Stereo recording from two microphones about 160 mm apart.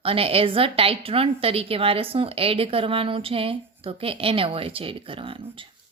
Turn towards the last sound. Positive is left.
turn(degrees=-35)  # may be behind; listen again after turning